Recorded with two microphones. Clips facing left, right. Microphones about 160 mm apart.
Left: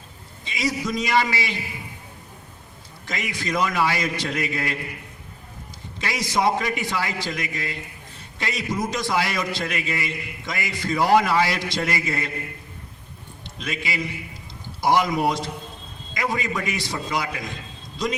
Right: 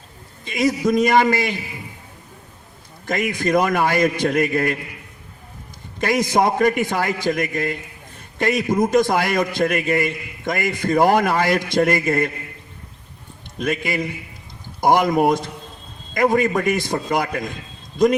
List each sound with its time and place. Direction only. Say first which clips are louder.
0.4 s a man's voice: right 7 dB; 50° right (ahead or behind)
3.1 s a man's voice: right 9 dB; 50° right (ahead or behind)
6.0 s a man's voice: right 6 dB; 50° right (ahead or behind)
13.6 s a man's voice: right 7 dB; 50° right (ahead or behind)